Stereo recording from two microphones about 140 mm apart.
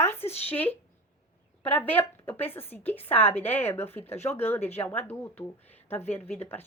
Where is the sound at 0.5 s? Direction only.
15° left (ahead or behind).